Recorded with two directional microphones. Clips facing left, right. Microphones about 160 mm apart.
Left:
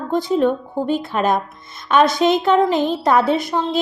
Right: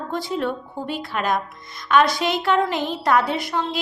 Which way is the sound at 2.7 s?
45° left (ahead or behind).